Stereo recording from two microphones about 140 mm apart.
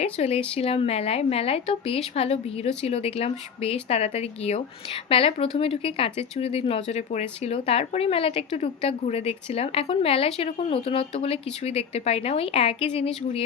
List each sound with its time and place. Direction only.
0.0 s speech: 50° left (ahead or behind)